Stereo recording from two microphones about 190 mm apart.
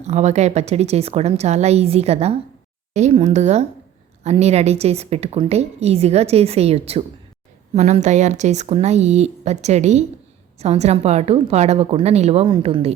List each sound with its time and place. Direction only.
0.1 s a woman's voice: 35° right (ahead or behind)